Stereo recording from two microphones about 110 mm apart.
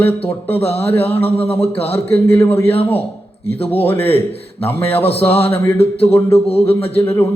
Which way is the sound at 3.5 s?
65° left (ahead or behind).